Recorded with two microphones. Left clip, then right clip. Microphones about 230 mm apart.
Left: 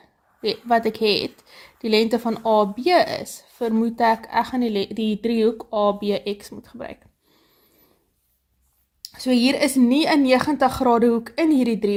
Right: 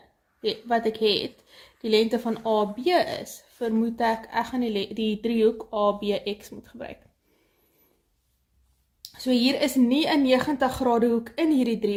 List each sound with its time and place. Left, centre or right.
0.4 s a woman's voice: left
9.0 s a woman's voice: left